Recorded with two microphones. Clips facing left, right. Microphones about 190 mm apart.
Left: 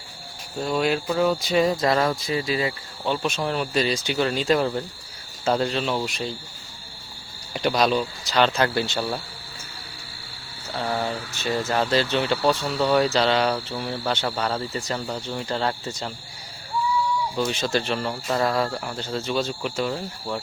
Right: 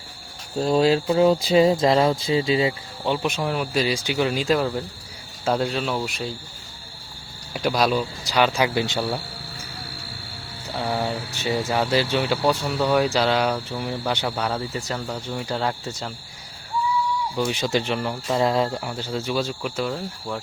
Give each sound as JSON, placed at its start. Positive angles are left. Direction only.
{"t": 0.6, "sound": "speech", "side_deg": -30}
{"t": 7.5, "sound": "speech", "side_deg": -5}
{"t": 10.7, "sound": "speech", "side_deg": -15}
{"t": 17.3, "sound": "speech", "side_deg": -15}